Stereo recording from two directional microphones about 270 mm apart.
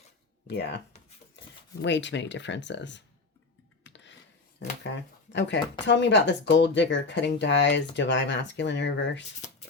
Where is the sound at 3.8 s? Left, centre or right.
Left.